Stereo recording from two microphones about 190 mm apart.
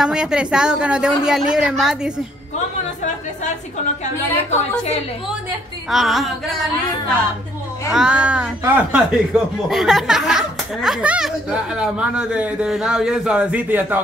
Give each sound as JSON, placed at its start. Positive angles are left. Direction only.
{"t": 0.0, "sound": "speech", "side_deg": -5}
{"t": 4.0, "sound": "a woman's voice", "side_deg": 35}
{"t": 5.9, "sound": "speech", "side_deg": 0}
{"t": 7.9, "sound": "speech", "side_deg": -5}